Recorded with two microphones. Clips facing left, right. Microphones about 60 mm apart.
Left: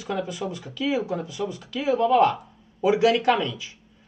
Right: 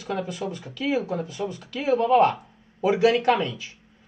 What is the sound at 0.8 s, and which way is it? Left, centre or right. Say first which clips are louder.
Speech: even; right.